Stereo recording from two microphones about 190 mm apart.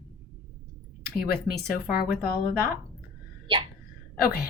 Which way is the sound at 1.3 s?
55° left (ahead or behind).